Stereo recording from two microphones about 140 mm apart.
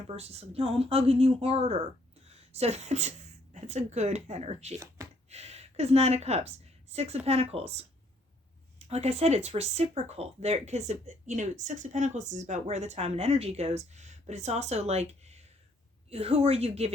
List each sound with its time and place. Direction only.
0.1 s a woman's voice: 45° right (ahead or behind)
8.9 s speech: 50° right (ahead or behind)